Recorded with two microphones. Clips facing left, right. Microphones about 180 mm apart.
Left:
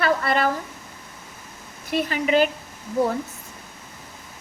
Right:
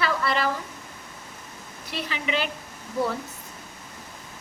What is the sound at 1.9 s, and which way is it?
Speech, 45° left (ahead or behind).